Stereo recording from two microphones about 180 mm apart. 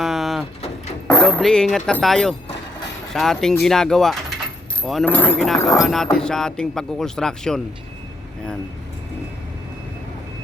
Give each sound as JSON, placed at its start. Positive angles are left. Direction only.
{"t": 0.0, "sound": "a sound", "side_deg": 0}
{"t": 1.0, "sound": "speech", "side_deg": 5}
{"t": 5.8, "sound": "speech", "side_deg": 0}